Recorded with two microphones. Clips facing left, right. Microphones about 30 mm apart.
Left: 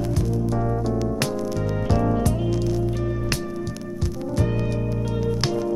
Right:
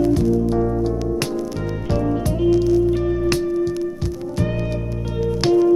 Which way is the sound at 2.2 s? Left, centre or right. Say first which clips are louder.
Right 6 dB; centre.